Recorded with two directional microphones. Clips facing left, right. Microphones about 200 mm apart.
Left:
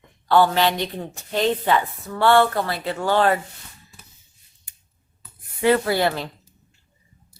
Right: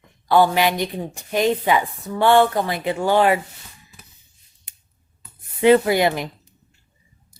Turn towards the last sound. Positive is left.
turn(degrees=-15)  # may be behind; listen again after turning